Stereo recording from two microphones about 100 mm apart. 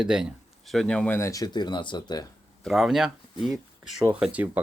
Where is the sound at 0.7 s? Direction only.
5° left (ahead or behind).